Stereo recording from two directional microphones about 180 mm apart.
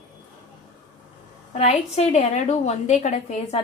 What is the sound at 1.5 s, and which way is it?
A woman's voice, 40° left (ahead or behind).